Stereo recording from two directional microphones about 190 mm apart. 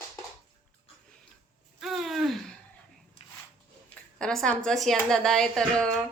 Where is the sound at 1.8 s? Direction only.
Centre (ahead or behind).